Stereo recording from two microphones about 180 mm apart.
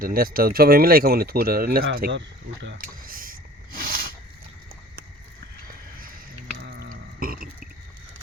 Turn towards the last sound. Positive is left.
turn(degrees=-50)  # may be behind; listen again after turning